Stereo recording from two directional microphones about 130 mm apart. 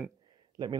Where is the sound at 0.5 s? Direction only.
35° right (ahead or behind).